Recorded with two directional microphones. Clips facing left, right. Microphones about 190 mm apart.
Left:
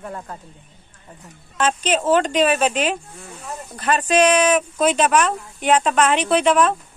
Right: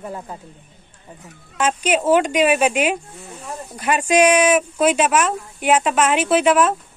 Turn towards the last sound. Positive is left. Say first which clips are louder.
# right 1 dB
turn(degrees=-5)  # may be behind; listen again after turning